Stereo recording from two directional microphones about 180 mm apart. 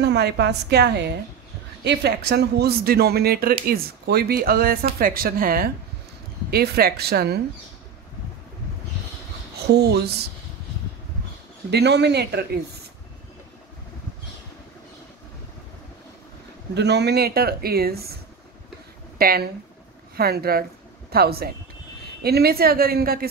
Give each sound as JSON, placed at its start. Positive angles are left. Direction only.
{"t": 0.0, "sound": "a woman's voice", "side_deg": -70}
{"t": 9.7, "sound": "speech", "side_deg": -65}
{"t": 11.7, "sound": "a woman's voice", "side_deg": -70}
{"t": 16.7, "sound": "speech", "side_deg": -70}
{"t": 19.1, "sound": "speech", "side_deg": -55}